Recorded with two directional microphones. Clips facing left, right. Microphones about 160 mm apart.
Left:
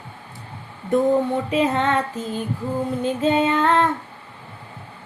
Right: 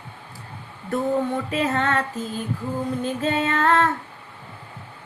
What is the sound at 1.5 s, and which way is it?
Female singing, 10° left (ahead or behind).